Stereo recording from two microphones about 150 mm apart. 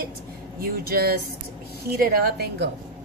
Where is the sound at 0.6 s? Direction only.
85° right.